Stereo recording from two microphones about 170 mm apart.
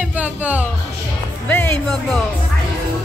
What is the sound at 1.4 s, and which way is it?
Music, 10° left (ahead or behind).